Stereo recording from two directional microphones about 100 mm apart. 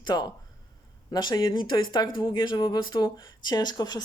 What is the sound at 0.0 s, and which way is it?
Speech, 45° left (ahead or behind).